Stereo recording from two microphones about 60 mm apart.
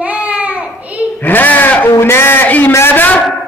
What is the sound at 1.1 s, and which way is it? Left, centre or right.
A man's voice, left.